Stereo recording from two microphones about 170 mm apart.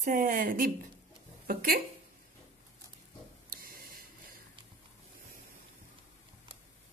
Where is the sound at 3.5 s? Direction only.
55° right (ahead or behind).